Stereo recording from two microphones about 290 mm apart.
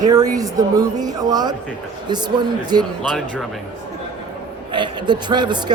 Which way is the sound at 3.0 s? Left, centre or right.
Centre.